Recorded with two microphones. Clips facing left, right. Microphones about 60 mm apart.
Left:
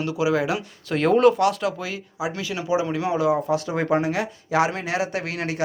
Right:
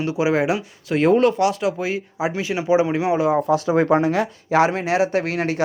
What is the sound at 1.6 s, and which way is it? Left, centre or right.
Speech, right.